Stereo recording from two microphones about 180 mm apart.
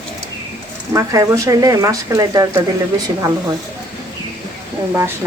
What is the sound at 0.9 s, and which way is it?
Speech, 15° right (ahead or behind).